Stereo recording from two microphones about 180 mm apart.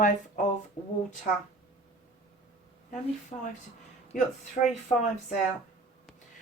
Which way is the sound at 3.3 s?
35° left (ahead or behind).